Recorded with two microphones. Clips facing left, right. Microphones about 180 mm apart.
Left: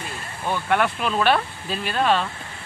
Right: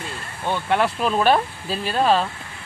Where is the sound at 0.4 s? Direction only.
30° right (ahead or behind).